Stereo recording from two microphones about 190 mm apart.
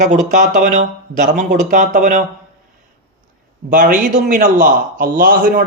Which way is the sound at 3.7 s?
45° right (ahead or behind).